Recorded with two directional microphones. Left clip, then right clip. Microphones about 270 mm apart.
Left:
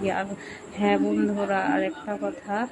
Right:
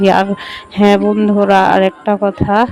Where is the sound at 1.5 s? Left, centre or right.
Right.